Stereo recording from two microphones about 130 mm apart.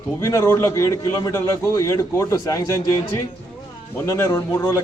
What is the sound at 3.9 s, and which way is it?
Speech, 20° left (ahead or behind).